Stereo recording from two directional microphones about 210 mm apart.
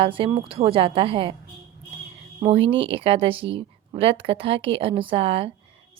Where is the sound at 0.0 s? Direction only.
25° right (ahead or behind).